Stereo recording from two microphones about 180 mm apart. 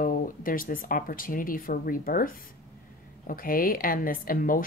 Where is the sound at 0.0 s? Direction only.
50° left (ahead or behind).